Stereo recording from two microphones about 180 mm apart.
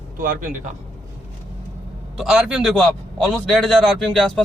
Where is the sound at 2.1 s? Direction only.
Centre (ahead or behind).